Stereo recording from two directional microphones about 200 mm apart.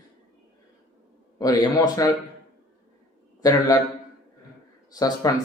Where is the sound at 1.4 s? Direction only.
20° left (ahead or behind).